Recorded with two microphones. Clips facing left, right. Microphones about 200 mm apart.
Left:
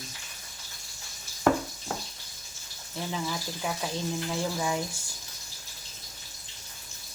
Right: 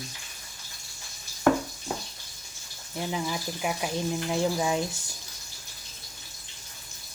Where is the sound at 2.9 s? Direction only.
15° right (ahead or behind).